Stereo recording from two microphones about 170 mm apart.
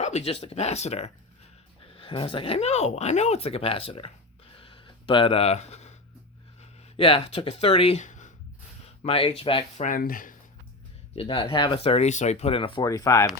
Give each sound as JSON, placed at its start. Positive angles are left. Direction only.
{"t": 0.0, "sound": "speech", "side_deg": 40}
{"t": 4.5, "sound": "a sound", "side_deg": 30}
{"t": 6.6, "sound": "speech", "side_deg": 30}
{"t": 9.0, "sound": "speech", "side_deg": 35}
{"t": 9.8, "sound": "speech", "side_deg": 55}
{"t": 11.1, "sound": "speech", "side_deg": 35}
{"t": 12.8, "sound": "speech", "side_deg": 20}